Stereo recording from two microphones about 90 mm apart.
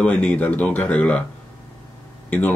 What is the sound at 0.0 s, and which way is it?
Speech, 15° left (ahead or behind).